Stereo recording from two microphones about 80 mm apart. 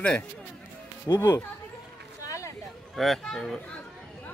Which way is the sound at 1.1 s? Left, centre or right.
Left.